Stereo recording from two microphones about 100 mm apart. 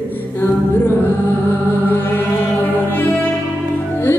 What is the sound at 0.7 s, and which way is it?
Music, 20° left (ahead or behind).